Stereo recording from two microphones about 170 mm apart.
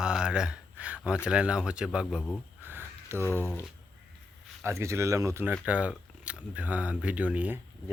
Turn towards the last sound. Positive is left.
turn(degrees=-10)  # may be behind; listen again after turning